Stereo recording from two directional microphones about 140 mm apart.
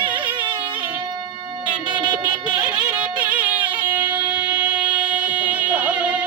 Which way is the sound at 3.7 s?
10° right (ahead or behind).